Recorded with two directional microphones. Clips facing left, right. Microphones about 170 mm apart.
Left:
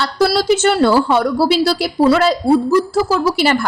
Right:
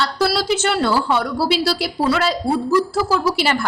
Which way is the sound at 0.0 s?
45° left (ahead or behind).